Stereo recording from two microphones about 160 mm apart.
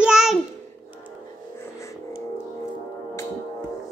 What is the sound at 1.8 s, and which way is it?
Music, 20° left (ahead or behind).